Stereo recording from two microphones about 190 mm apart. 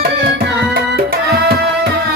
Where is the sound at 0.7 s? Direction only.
55° right (ahead or behind).